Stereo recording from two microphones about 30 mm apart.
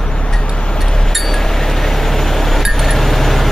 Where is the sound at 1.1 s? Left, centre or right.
Centre.